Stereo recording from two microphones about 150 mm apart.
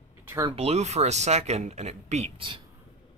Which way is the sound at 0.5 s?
45° right (ahead or behind).